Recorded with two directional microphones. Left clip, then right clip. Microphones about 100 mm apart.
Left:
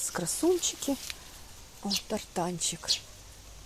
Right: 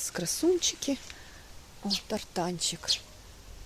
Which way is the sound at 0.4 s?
25° right (ahead or behind).